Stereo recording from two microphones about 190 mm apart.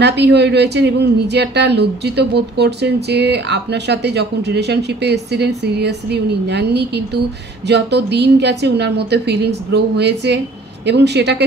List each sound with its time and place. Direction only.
0.0 s a woman's voice: 65° right (ahead or behind)